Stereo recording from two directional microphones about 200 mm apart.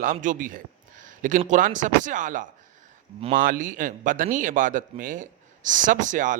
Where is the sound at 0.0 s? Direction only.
40° right (ahead or behind).